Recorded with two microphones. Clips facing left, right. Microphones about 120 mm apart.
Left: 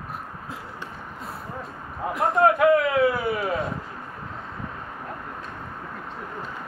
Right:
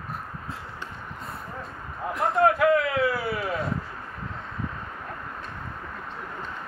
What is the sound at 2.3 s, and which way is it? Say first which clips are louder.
A man's voice: left 2 dB; 20° left (ahead or behind).